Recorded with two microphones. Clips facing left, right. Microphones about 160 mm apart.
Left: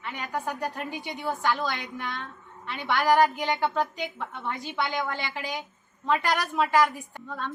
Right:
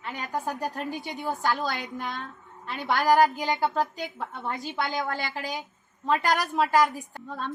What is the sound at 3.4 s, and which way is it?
Speech, 10° right (ahead or behind).